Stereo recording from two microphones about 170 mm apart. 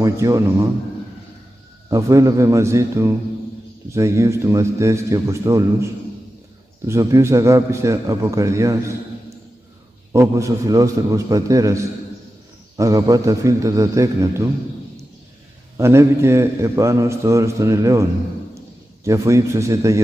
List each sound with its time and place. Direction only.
0.0 s a man's voice: 20° right (ahead or behind)
1.9 s a man's voice: 20° right (ahead or behind)
6.9 s a man's voice: 15° right (ahead or behind)
10.1 s a man's voice: 15° right (ahead or behind)
15.8 s a man's voice: 15° right (ahead or behind)
19.0 s a man's voice: 15° right (ahead or behind)